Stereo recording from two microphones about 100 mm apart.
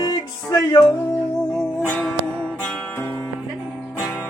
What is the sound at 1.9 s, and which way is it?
Music, 10° left (ahead or behind).